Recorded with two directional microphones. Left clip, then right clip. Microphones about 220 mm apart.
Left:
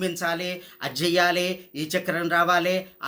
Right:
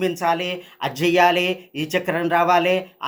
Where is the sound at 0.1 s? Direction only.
15° left (ahead or behind).